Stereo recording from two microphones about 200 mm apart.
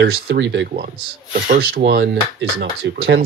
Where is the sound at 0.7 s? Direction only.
50° right (ahead or behind).